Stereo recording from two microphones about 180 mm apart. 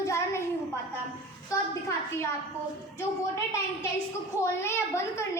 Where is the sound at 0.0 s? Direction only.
15° left (ahead or behind).